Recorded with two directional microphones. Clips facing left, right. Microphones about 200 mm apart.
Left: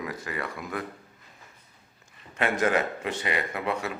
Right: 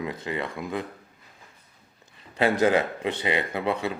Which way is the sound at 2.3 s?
30° right (ahead or behind).